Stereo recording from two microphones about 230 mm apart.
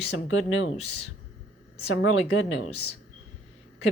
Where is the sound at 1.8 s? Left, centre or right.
Left.